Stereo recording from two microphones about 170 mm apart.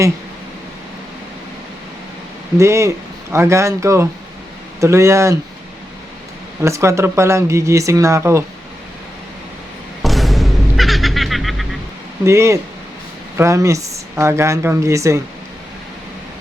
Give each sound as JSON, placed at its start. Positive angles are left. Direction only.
{"t": 2.6, "sound": "speech", "side_deg": -15}
{"t": 6.6, "sound": "speech", "side_deg": -15}
{"t": 10.0, "sound": "a sound", "side_deg": 0}
{"t": 12.2, "sound": "speech", "side_deg": -15}